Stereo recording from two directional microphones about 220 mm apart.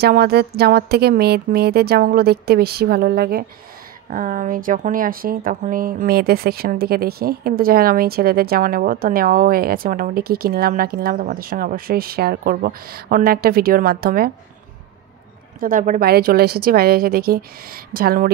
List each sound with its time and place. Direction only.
0.0 s speech: 45° right (ahead or behind)
15.6 s speech: 35° right (ahead or behind)